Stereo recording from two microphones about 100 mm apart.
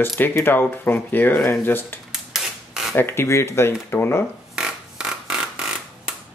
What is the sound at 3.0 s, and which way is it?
Speech, 25° left (ahead or behind).